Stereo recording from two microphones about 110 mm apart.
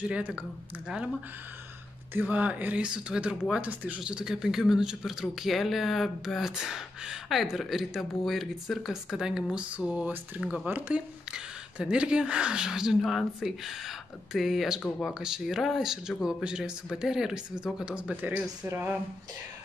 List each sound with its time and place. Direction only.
0.0 s speech: 10° right (ahead or behind)
2.1 s speech: 15° right (ahead or behind)